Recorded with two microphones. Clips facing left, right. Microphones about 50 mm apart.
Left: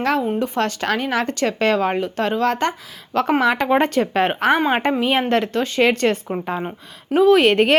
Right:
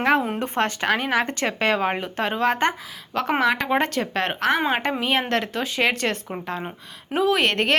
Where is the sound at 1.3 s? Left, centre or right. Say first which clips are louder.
Left 4 dB; right.